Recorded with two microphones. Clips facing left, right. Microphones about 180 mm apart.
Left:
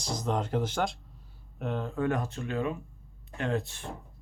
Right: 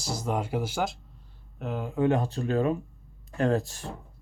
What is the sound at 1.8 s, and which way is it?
Speech, 20° right (ahead or behind).